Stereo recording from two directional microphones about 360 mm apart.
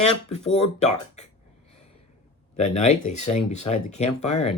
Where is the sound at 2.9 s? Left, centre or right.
Centre.